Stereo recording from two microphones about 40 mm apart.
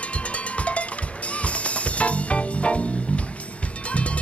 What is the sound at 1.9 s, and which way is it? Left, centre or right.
Music, left.